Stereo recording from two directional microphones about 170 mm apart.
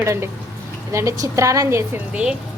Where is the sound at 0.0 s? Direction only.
15° right (ahead or behind).